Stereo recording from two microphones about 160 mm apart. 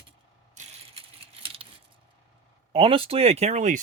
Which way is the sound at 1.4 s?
35° right (ahead or behind).